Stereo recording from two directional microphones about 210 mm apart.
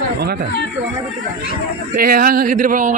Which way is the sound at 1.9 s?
45° right (ahead or behind).